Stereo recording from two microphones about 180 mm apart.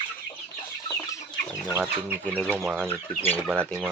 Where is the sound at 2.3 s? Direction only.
5° left (ahead or behind).